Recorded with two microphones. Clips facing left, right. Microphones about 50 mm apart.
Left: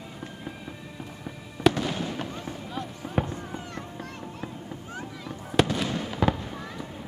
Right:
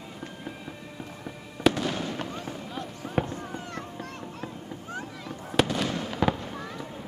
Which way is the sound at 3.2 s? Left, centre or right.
Left.